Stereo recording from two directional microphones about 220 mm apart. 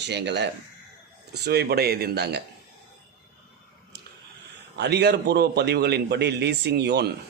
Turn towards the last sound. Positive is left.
turn(degrees=-50)  # may be behind; listen again after turning